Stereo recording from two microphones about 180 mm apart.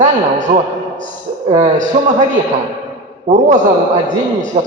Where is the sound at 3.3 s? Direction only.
40° right (ahead or behind).